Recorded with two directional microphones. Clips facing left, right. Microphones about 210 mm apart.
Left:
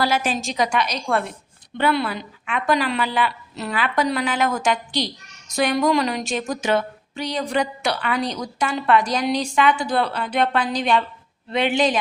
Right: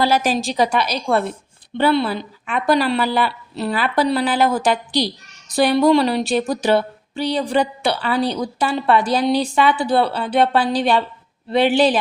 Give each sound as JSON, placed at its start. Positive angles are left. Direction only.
{"t": 0.0, "sound": "a woman's voice", "side_deg": -35}